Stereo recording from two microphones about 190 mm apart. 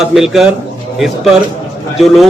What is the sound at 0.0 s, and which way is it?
A man's voice, centre (ahead or behind).